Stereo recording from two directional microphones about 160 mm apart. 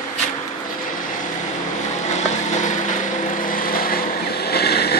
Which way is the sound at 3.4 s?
60° left (ahead or behind).